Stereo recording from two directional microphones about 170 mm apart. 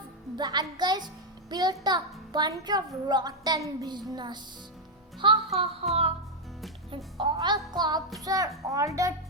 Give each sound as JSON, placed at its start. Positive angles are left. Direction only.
{"t": 0.3, "sound": "a child's voice", "side_deg": -25}
{"t": 5.9, "sound": "music", "side_deg": -35}
{"t": 6.9, "sound": "a child's voice", "side_deg": -30}